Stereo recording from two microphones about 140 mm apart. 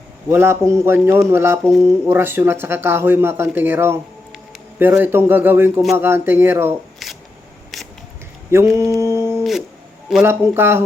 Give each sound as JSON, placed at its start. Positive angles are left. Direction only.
{"t": 0.3, "sound": "speech", "side_deg": -15}
{"t": 1.6, "sound": "music", "side_deg": 5}
{"t": 2.0, "sound": "speech", "side_deg": -15}
{"t": 7.0, "sound": "a sound", "side_deg": 0}
{"t": 8.4, "sound": "mantra", "side_deg": -20}
{"t": 9.4, "sound": "music", "side_deg": 0}
{"t": 10.2, "sound": "speech", "side_deg": -15}